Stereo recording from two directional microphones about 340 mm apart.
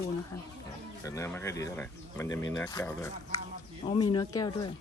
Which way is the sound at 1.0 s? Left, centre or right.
Centre.